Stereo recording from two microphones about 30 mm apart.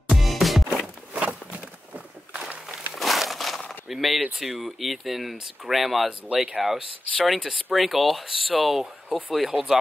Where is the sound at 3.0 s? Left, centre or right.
Centre.